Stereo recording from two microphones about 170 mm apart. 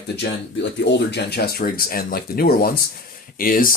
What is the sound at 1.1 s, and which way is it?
Speech, 70° left (ahead or behind).